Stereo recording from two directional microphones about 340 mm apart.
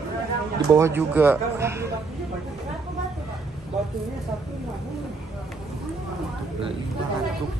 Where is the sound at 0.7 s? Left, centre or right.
Centre.